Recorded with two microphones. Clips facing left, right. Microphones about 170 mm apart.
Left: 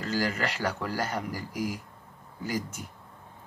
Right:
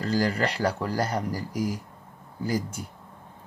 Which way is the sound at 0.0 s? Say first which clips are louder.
Right 4 dB; 35° right (ahead or behind).